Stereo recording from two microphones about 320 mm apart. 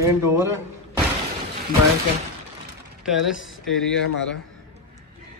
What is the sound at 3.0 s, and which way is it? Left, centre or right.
Speech, centre.